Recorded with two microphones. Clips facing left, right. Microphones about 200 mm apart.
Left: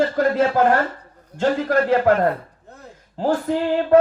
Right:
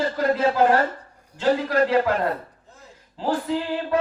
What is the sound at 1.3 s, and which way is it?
Music, 50° left (ahead or behind).